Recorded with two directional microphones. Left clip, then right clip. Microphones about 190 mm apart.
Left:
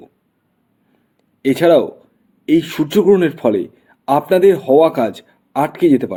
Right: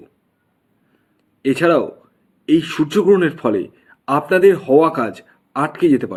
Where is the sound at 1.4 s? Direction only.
25° left (ahead or behind).